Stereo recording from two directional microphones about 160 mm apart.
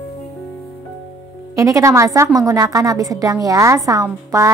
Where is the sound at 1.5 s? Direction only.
20° right (ahead or behind).